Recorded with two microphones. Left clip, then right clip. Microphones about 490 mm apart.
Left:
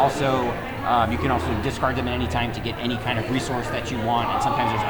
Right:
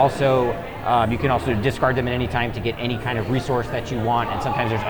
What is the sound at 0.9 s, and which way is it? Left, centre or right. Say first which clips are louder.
Speech: right 2 dB; right.